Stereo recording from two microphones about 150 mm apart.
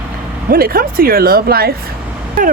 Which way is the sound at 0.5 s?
80° right.